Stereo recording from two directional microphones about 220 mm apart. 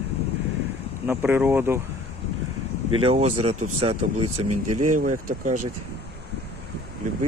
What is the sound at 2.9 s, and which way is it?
Speech, 25° right (ahead or behind).